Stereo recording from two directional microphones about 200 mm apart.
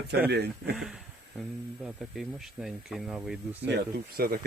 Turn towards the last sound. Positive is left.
turn(degrees=-50)  # may be behind; listen again after turning